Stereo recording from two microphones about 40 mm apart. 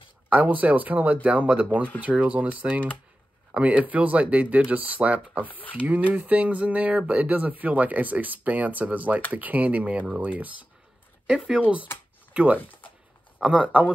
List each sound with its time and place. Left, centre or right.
0.3 s speech: right
5.5 s speech: left
6.1 s speech: right
10.0 s speech: right
11.6 s speech: right
13.4 s speech: right